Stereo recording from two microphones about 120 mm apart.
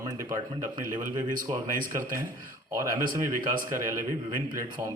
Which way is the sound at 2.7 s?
35° right (ahead or behind).